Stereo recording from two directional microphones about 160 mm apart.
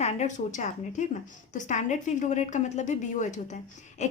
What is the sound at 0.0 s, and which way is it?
Speech, 45° left (ahead or behind).